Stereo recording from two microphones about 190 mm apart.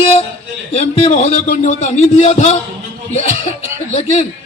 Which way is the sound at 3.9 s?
35° left (ahead or behind).